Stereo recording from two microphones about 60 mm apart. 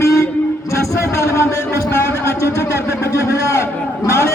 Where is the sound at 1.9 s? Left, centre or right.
Left.